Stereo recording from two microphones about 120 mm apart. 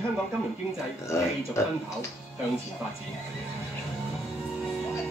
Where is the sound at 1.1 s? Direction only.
20° left (ahead or behind).